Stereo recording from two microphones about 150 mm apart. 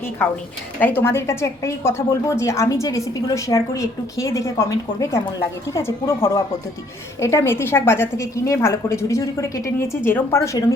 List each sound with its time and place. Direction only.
0.8 s a woman's voice: 15° left (ahead or behind)